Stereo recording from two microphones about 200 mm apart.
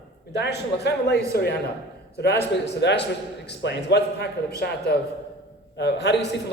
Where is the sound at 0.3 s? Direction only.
60° left (ahead or behind).